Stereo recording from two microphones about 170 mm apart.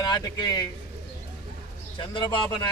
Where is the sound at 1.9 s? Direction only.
25° left (ahead or behind).